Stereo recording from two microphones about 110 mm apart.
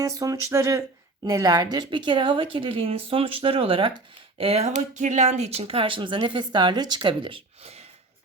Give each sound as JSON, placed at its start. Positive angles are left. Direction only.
{"t": 0.0, "sound": "a woman's voice", "side_deg": -30}
{"t": 4.4, "sound": "speech", "side_deg": -65}